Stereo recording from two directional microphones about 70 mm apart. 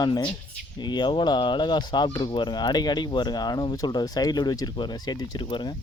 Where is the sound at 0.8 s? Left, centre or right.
Left.